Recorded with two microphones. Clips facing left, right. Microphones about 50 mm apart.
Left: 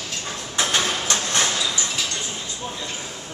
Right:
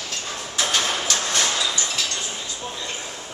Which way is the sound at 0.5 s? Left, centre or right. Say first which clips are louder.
Left 1 dB; left.